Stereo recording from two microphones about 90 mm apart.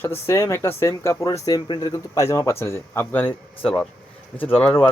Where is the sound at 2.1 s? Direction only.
35° left (ahead or behind).